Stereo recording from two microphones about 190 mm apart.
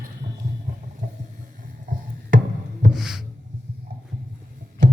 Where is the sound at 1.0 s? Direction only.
45° right (ahead or behind).